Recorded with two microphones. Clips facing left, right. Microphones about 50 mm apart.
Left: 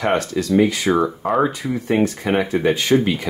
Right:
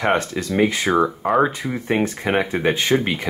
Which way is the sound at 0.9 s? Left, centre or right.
Centre.